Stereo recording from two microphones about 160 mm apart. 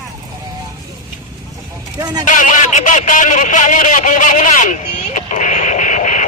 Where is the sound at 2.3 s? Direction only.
55° left (ahead or behind).